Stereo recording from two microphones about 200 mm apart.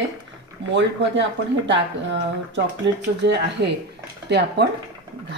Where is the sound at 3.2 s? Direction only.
60° right (ahead or behind).